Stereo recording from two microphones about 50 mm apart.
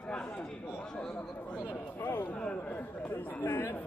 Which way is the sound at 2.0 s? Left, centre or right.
Left.